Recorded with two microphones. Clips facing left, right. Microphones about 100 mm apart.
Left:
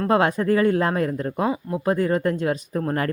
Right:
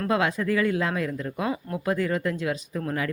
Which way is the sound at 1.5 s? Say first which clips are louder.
Left 3 dB; 30° left (ahead or behind).